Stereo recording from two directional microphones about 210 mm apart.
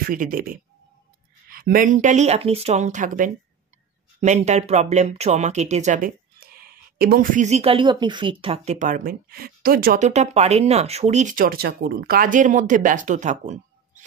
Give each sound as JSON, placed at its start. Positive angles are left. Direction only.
{"t": 0.1, "sound": "speech", "side_deg": -40}